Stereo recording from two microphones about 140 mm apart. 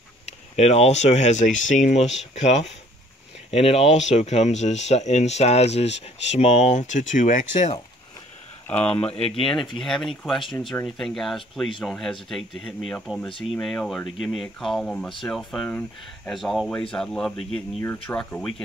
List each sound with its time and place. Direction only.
0.6 s speech: 50° left (ahead or behind)
8.8 s speech: 45° left (ahead or behind)
9.8 s speech: centre (ahead or behind)